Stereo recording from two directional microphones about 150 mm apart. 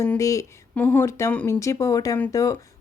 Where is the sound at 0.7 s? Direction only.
10° left (ahead or behind).